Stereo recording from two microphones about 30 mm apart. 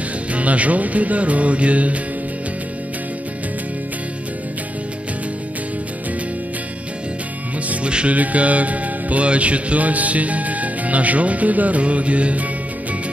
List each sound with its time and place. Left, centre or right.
0.3 s music: right
8.1 s music: right